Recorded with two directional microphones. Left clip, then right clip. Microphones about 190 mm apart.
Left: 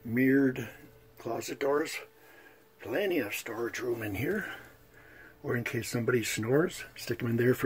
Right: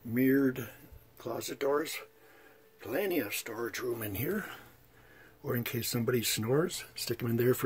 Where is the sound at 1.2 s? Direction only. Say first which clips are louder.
Left 2 dB; 20° right (ahead or behind).